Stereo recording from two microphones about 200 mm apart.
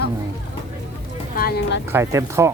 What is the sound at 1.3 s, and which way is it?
Speech, 50° left (ahead or behind).